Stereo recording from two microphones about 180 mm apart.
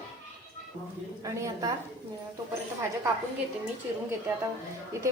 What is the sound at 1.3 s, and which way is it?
Speech, 20° right (ahead or behind).